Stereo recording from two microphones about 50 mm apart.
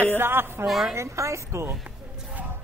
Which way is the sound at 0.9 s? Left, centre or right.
Right.